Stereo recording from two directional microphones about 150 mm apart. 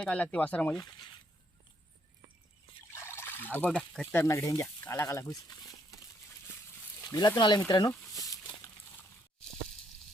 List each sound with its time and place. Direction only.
0.0 s speech: 5° left (ahead or behind)
0.8 s speech: 30° left (ahead or behind)
2.9 s trickle: 15° left (ahead or behind)
3.9 s speech: 10° left (ahead or behind)
7.0 s speech: 25° left (ahead or behind)
8.1 s a sound: 25° left (ahead or behind)